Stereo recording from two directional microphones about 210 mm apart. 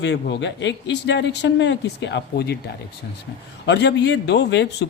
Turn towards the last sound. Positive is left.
turn(degrees=55)  # may be behind; listen again after turning